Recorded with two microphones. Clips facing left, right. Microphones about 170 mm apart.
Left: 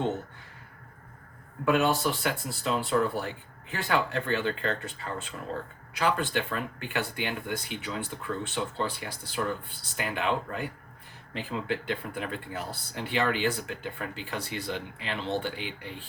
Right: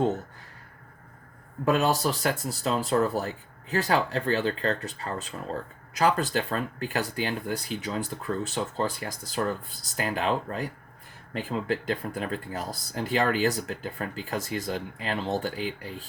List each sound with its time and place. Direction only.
1.6 s speech: 40° right (ahead or behind)